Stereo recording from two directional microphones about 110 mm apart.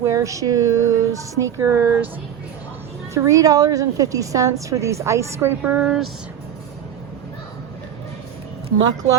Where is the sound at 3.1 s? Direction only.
30° right (ahead or behind); by 6.0 s 5° right (ahead or behind).